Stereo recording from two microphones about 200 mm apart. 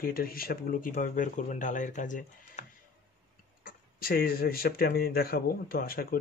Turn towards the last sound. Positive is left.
turn(degrees=50)  # may be behind; listen again after turning